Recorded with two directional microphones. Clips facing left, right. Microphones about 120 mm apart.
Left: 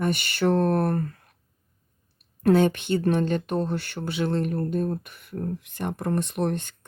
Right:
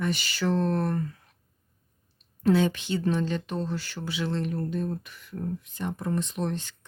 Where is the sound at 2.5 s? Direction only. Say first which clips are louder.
Left 4 dB; 55° left (ahead or behind).